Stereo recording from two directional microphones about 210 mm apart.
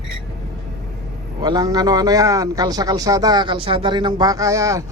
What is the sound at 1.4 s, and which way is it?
A man's voice, 20° right (ahead or behind).